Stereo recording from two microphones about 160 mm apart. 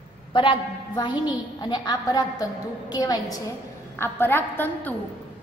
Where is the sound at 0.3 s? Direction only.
30° left (ahead or behind).